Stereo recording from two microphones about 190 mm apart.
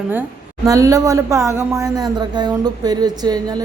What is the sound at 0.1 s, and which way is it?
A woman's voice, 15° right (ahead or behind).